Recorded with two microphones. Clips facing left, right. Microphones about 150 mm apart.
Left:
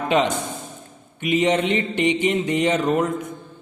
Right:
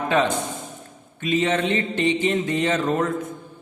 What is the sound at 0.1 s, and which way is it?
A man's voice, 15° left (ahead or behind).